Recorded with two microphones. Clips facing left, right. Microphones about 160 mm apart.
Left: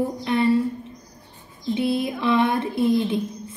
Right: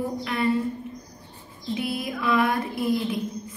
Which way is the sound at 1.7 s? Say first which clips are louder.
Left 6 dB; 25° left (ahead or behind).